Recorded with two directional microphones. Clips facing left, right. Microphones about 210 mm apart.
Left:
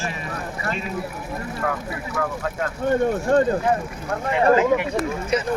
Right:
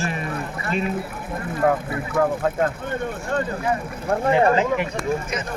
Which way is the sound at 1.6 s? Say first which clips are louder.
Right 8 dB; 30° right (ahead or behind).